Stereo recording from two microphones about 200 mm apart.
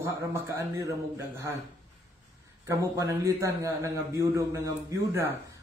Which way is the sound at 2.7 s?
15° right (ahead or behind).